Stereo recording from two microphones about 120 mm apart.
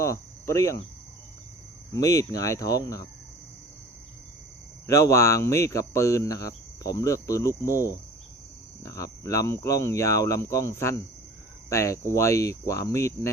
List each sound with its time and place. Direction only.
0.0 s cricket: 25° left (ahead or behind)
1.9 s speech: 25° left (ahead or behind)
4.9 s speech: 25° left (ahead or behind)